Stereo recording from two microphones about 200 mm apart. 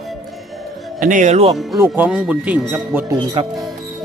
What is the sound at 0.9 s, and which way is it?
Speech, 40° right (ahead or behind).